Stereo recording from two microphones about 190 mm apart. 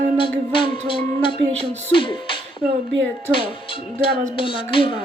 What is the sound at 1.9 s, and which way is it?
Music, 25° left (ahead or behind).